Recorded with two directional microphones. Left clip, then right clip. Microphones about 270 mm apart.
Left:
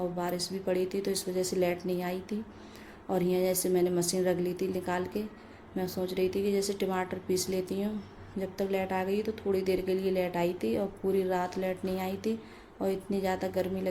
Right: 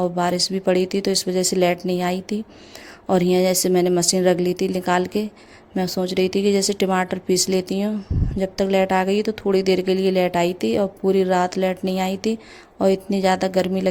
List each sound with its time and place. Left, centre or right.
0.0 s speech: right